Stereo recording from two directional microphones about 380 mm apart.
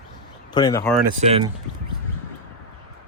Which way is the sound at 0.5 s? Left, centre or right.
Centre.